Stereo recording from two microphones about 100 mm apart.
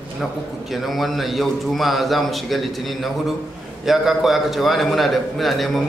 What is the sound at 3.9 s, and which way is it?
A man's voice, 5° right (ahead or behind).